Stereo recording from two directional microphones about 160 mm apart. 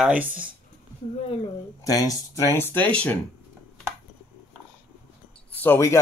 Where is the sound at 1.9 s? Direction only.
25° left (ahead or behind).